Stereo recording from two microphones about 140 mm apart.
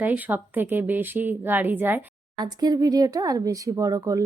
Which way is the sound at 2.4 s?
30° right (ahead or behind).